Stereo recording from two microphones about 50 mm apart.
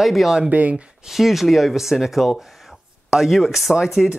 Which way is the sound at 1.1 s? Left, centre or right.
Centre.